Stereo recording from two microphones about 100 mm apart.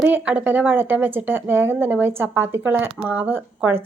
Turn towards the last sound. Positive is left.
turn(degrees=-20)  # may be behind; listen again after turning